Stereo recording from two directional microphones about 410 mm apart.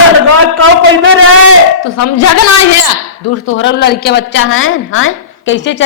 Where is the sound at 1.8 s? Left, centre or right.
Left.